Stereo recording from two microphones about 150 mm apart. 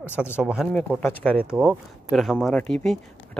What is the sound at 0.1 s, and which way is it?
Speech, 10° right (ahead or behind).